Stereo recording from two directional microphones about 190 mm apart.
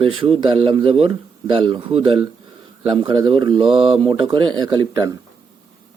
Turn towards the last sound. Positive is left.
turn(degrees=-20)  # may be behind; listen again after turning